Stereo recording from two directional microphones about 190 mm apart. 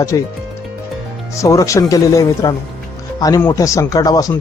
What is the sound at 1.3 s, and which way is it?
A man's voice, 15° left (ahead or behind).